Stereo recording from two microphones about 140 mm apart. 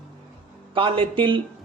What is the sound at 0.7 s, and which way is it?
Speech, 40° right (ahead or behind).